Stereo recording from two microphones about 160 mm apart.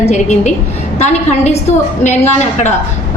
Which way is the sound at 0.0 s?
45° left (ahead or behind).